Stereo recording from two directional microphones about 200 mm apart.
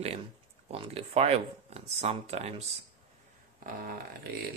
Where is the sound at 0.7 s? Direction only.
30° right (ahead or behind).